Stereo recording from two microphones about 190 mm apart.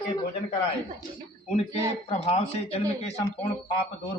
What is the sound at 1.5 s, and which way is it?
Speech, 30° left (ahead or behind).